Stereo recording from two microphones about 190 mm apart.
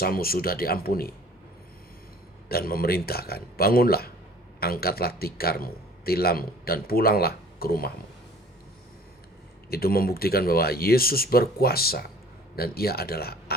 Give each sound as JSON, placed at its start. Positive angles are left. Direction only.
{"t": 0.0, "sound": "a man's voice", "side_deg": 50}
{"t": 2.5, "sound": "a man's voice", "side_deg": 50}
{"t": 9.6, "sound": "a man's voice", "side_deg": 55}